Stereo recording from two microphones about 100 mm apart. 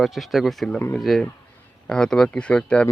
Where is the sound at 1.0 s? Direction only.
Centre (ahead or behind).